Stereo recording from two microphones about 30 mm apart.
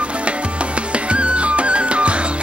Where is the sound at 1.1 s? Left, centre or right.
Right.